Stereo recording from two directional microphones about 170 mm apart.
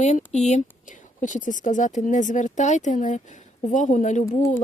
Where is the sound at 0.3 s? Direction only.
40° left (ahead or behind).